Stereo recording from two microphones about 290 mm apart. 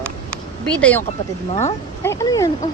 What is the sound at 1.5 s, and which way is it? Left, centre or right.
Speech, left.